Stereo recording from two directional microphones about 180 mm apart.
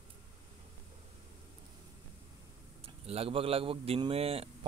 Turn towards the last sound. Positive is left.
turn(degrees=-35)  # may be behind; listen again after turning